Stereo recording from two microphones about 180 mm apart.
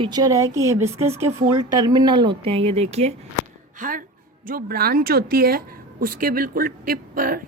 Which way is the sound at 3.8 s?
50° right (ahead or behind).